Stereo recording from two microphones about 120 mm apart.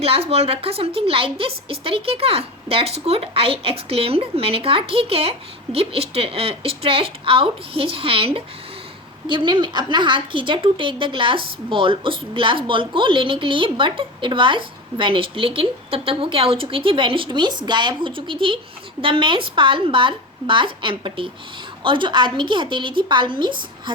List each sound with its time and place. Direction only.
0.0 s a woman's voice: 55° right (ahead or behind)